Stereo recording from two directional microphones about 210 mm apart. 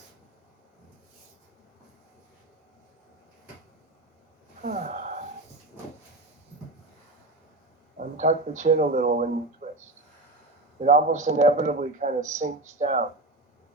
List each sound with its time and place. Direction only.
4.6 s speech: 35° right (ahead or behind)
7.9 s a man's voice: 35° right (ahead or behind)
10.8 s a man's voice: 35° right (ahead or behind)